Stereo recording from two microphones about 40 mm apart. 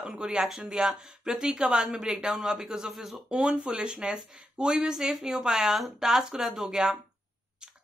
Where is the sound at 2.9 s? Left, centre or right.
Centre.